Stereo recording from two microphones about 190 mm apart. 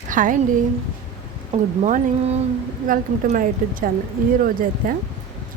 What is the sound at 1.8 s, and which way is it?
Speech, 35° right (ahead or behind).